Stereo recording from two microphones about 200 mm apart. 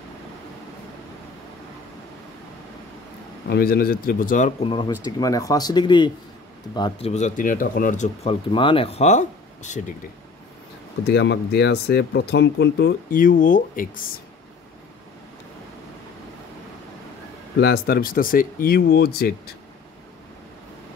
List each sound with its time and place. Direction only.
3.4 s speech: 50° left (ahead or behind)
4.6 s speech: 25° left (ahead or behind)
11.1 s speech: 55° left (ahead or behind)
17.6 s speech: 50° left (ahead or behind)